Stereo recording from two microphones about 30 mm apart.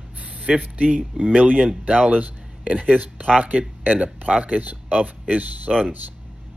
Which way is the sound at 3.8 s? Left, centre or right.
Right.